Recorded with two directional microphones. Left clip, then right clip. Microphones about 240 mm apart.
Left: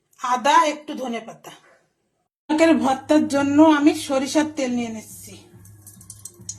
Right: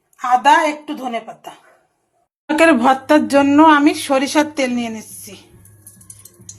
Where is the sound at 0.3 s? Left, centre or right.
Centre.